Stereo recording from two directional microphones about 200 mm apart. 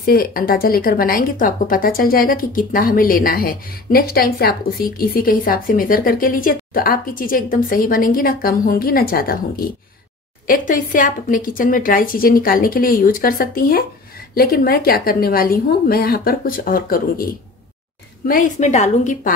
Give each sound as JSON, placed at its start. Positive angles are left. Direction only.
{"t": 0.0, "sound": "a woman's voice", "side_deg": 50}
{"t": 18.2, "sound": "a woman's voice", "side_deg": 45}